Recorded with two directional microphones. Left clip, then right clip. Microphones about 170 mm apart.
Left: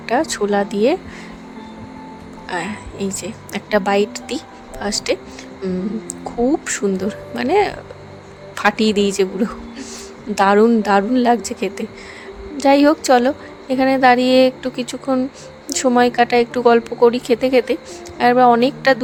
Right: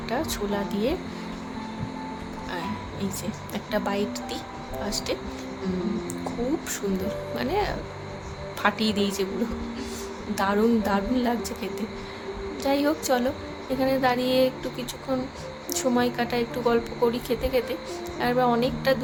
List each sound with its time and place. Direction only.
0.0 s a woman's voice: 50° left (ahead or behind)
2.5 s a woman's voice: 50° left (ahead or behind)
5.6 s music: 40° left (ahead or behind)
6.7 s a woman's voice: 50° left (ahead or behind)
10.3 s a woman's voice: 55° left (ahead or behind)